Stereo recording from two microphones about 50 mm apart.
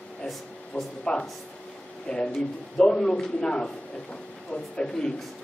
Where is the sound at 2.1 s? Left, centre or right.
Centre.